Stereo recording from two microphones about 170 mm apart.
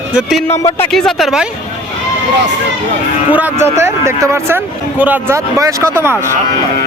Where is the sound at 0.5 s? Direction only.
15° left (ahead or behind).